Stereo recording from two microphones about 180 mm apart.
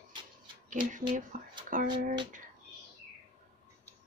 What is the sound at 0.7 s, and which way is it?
Speech, 45° right (ahead or behind).